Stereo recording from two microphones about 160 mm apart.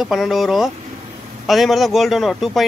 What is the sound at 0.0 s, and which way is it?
A man's voice, centre (ahead or behind).